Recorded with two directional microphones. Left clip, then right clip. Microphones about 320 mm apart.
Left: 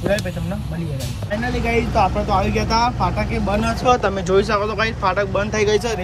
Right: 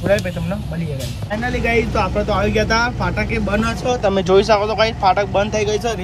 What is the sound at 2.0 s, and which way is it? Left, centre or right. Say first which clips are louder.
Speech: even; centre.